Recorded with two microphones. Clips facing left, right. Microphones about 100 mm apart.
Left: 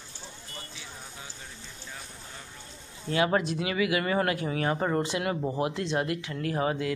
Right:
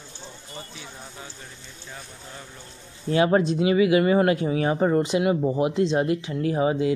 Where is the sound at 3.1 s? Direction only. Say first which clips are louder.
Right 6 dB; 30° right (ahead or behind).